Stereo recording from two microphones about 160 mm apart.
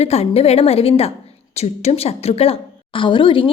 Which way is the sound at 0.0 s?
40° left (ahead or behind).